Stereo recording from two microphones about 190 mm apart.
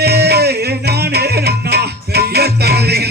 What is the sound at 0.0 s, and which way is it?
Music, 60° right (ahead or behind).